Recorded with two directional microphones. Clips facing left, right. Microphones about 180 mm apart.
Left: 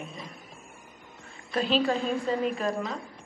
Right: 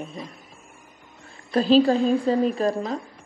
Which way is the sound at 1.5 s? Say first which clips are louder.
Right 8 dB; 35° right (ahead or behind).